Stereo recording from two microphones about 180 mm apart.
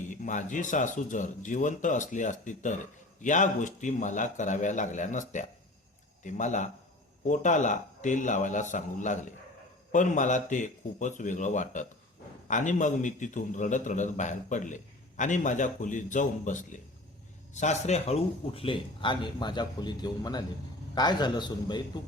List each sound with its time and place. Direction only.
0.1 s a man's voice: 45° left (ahead or behind); by 21.8 s 25° left (ahead or behind)